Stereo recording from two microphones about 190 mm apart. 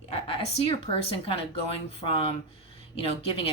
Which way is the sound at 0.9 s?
30° left (ahead or behind).